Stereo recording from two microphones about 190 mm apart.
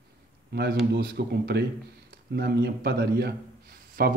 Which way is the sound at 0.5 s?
60° right (ahead or behind).